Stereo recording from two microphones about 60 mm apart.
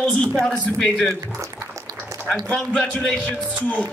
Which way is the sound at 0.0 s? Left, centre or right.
Left.